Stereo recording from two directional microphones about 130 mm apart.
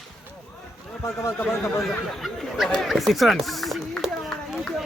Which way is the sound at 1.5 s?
Centre (ahead or behind).